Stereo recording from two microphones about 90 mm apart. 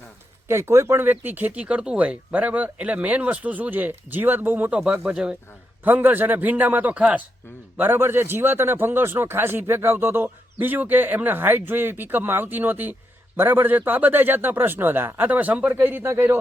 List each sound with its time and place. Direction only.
0.4 s a man's voice: 30° right (ahead or behind)
4.8 s a man's voice: 10° right (ahead or behind); by 16.4 s 25° right (ahead or behind)